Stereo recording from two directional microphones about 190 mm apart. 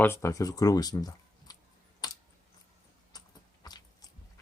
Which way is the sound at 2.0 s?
20° left (ahead or behind).